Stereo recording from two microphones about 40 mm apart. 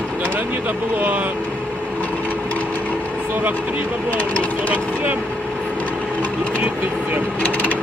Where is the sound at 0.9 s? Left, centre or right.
Right.